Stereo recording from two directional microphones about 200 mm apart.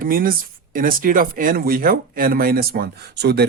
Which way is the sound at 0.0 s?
45° right (ahead or behind).